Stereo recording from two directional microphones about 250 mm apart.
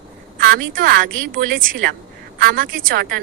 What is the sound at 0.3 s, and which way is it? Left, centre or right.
A woman's voice, right.